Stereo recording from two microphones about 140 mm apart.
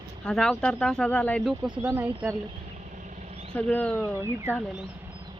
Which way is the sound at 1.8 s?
15° right (ahead or behind).